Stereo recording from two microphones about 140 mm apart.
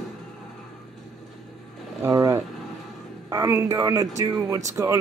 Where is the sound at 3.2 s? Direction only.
25° right (ahead or behind).